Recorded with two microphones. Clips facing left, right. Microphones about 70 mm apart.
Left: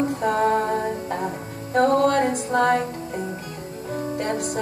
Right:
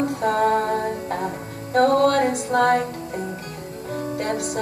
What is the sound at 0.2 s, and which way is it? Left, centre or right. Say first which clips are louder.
Music: right 2 dB; left.